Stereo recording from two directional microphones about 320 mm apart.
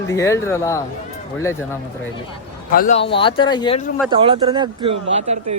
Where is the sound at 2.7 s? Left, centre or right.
Left.